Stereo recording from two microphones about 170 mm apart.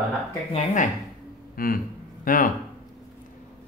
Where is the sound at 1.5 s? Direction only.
60° left (ahead or behind).